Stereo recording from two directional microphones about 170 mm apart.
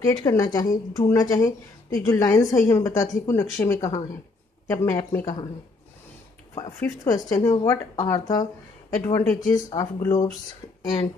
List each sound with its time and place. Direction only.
0.1 s a woman's voice: 20° left (ahead or behind)
6.8 s a woman's voice: 15° left (ahead or behind)